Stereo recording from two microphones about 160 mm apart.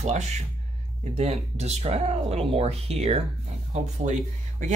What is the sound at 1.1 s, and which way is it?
Speech, 45° right (ahead or behind).